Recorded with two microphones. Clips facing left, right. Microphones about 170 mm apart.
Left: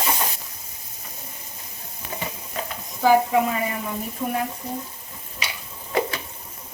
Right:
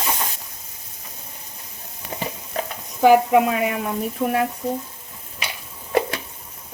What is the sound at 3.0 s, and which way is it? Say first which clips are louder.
Speech: right 4 dB; 65° right (ahead or behind).